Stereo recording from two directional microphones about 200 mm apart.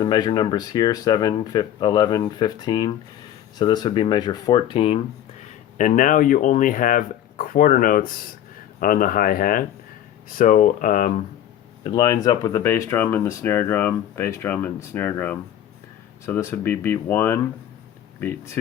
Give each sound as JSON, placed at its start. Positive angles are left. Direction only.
{"t": 0.0, "sound": "speech", "side_deg": 20}
{"t": 5.7, "sound": "speech", "side_deg": 40}
{"t": 11.8, "sound": "speech", "side_deg": 20}